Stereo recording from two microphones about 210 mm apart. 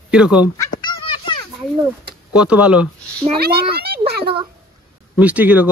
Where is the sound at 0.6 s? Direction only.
20° left (ahead or behind).